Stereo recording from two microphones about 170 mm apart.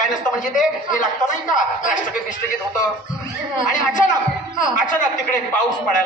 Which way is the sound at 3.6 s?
50° left (ahead or behind).